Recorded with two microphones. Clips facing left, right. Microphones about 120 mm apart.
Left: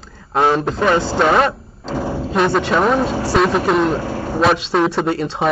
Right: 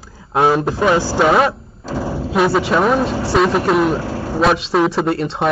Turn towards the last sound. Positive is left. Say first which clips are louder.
# right 1 dB
turn(degrees=0)  # may be behind; listen again after turning